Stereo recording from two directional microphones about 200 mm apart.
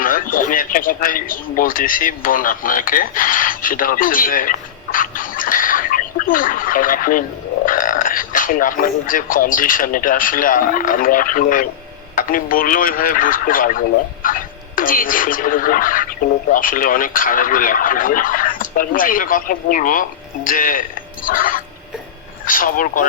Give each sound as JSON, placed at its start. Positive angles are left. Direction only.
{"t": 0.0, "sound": "speech", "side_deg": 45}